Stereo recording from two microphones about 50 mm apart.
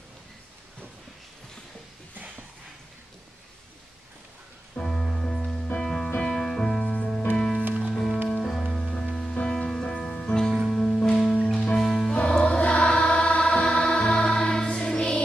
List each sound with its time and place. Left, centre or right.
4.8 s music: centre
12.2 s choir: centre